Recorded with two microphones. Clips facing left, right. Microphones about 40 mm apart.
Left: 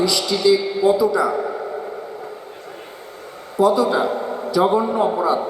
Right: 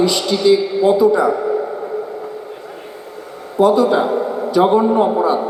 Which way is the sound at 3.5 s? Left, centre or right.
Right.